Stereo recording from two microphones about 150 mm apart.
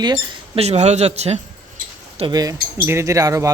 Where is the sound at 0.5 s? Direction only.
45° right (ahead or behind).